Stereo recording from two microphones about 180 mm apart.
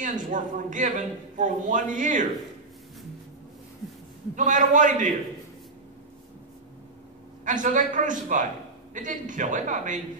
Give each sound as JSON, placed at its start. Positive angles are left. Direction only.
{"t": 0.0, "sound": "a man's voice", "side_deg": -45}
{"t": 4.4, "sound": "a man's voice", "side_deg": -45}
{"t": 7.4, "sound": "a man's voice", "side_deg": -45}